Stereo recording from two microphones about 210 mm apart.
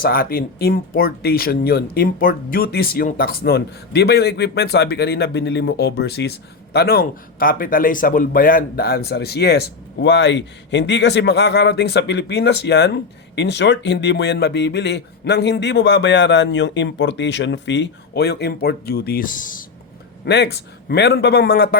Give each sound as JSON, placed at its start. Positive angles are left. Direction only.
{"t": 0.0, "sound": "speech", "side_deg": 45}
{"t": 20.2, "sound": "speech", "side_deg": 55}